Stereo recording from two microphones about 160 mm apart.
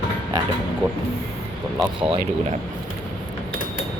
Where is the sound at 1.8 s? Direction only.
35° right (ahead or behind).